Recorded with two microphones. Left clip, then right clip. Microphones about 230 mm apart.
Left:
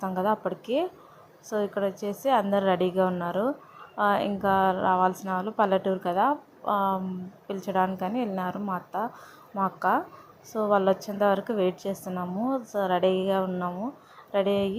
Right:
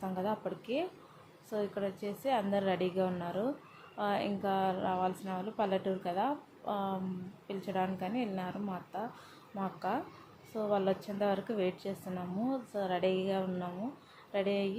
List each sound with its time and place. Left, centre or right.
0.0 s a woman's voice: centre